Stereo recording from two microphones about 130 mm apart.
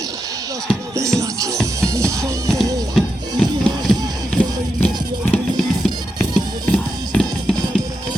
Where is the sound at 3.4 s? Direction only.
Centre (ahead or behind).